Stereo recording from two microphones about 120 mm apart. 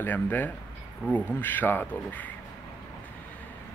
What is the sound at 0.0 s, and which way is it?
Speech, 15° left (ahead or behind).